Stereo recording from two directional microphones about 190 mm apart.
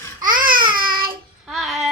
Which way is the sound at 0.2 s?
45° right (ahead or behind).